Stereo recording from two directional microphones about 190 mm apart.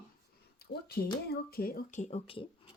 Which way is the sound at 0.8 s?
55° left (ahead or behind).